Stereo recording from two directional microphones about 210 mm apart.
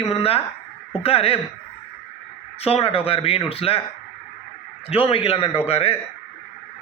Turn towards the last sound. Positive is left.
turn(degrees=30)  # may be behind; listen again after turning